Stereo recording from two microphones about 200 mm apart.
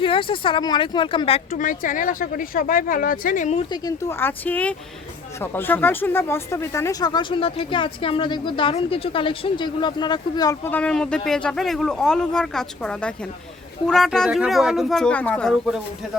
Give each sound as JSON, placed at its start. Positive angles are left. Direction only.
{"t": 0.0, "sound": "speech", "side_deg": 25}
{"t": 1.5, "sound": "speech", "side_deg": 40}
{"t": 3.7, "sound": "speech", "side_deg": 20}